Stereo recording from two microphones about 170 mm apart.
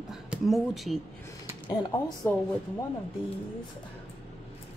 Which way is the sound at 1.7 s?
20° left (ahead or behind).